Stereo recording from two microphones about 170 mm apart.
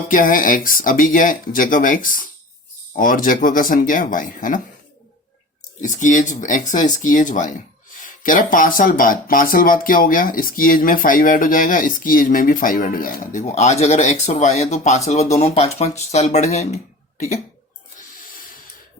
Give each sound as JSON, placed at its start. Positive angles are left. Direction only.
{"t": 0.1, "sound": "speech", "side_deg": 55}
{"t": 5.8, "sound": "speech", "side_deg": 45}